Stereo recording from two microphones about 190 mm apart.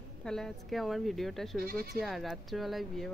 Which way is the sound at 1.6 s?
50° right (ahead or behind).